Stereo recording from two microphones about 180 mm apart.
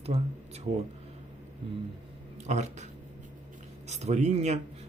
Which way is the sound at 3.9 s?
40° right (ahead or behind).